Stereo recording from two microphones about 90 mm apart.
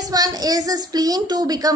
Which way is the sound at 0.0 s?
45° right (ahead or behind).